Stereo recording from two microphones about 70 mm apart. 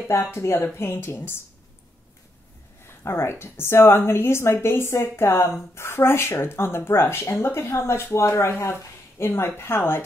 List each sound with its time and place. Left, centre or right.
0.1 s a woman's voice: left
3.0 s a woman's voice: left